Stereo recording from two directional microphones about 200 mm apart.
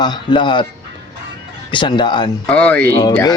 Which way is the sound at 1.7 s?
25° left (ahead or behind).